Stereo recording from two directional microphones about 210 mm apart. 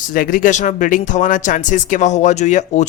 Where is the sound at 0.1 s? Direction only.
40° left (ahead or behind).